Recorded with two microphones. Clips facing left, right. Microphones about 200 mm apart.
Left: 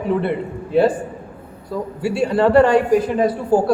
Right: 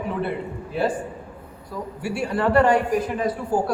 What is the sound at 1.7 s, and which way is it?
Speech, 30° left (ahead or behind).